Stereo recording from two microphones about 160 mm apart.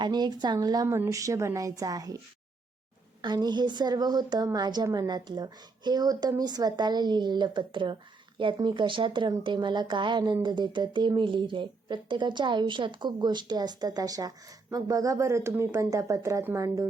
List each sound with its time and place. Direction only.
0.0 s a woman's voice: 25° right (ahead or behind)
3.2 s a woman's voice: 25° right (ahead or behind)